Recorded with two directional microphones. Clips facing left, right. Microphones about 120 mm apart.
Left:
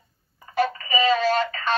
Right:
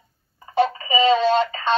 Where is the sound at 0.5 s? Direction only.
25° right (ahead or behind).